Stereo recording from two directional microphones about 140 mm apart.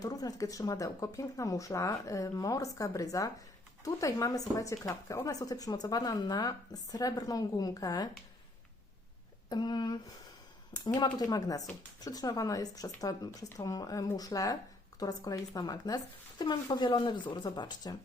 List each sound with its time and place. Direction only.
0.0 s speech: 25° left (ahead or behind)
9.5 s speech: 30° left (ahead or behind)